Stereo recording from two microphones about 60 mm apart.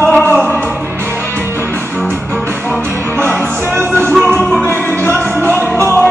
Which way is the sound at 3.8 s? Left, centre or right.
Right.